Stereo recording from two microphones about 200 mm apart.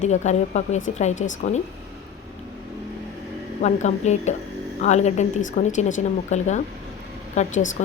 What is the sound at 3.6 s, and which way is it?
A woman's voice, 35° left (ahead or behind).